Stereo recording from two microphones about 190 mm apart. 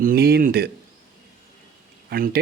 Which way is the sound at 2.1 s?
50° right (ahead or behind).